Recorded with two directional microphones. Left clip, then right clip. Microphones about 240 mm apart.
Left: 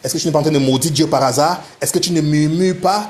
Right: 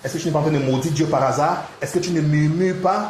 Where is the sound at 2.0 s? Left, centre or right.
Left.